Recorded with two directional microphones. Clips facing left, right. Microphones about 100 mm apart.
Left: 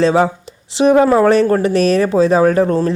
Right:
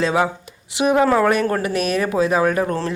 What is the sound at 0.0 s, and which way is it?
Speech, 35° left (ahead or behind).